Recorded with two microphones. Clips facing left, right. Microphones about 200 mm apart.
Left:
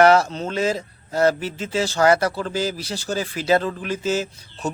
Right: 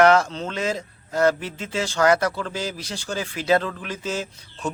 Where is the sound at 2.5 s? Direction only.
5° left (ahead or behind).